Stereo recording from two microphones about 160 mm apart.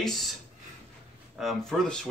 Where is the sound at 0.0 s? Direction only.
Centre (ahead or behind).